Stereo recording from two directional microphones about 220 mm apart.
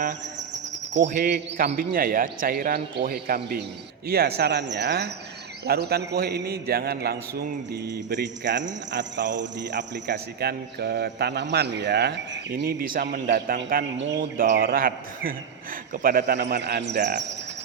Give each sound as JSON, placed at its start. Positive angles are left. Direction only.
{"t": 1.0, "sound": "a man's voice", "side_deg": -45}
{"t": 3.0, "sound": "mantra", "side_deg": -45}
{"t": 13.9, "sound": "mantra", "side_deg": -55}